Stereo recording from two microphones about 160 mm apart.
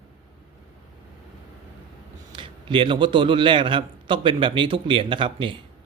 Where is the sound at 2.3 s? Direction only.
30° right (ahead or behind).